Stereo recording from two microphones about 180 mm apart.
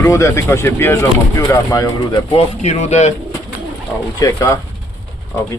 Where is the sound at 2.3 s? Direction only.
35° left (ahead or behind).